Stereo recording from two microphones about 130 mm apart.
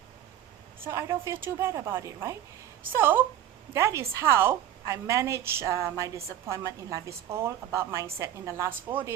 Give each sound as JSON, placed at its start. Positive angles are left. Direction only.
{"t": 0.8, "sound": "a woman's voice", "side_deg": -20}